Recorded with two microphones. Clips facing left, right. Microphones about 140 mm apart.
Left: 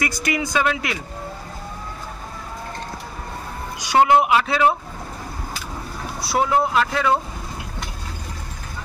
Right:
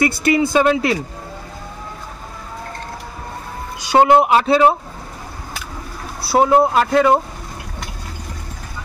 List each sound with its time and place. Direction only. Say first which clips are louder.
0.0 s speech: right 8 dB; 30° right (ahead or behind)
3.8 s speech: right 3 dB; 30° right (ahead or behind)
6.2 s speech: right 6 dB; 35° right (ahead or behind)